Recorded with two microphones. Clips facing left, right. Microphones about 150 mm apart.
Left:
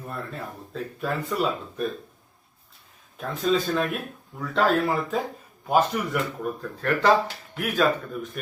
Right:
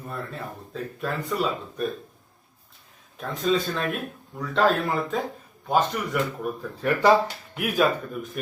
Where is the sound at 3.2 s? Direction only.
Centre (ahead or behind).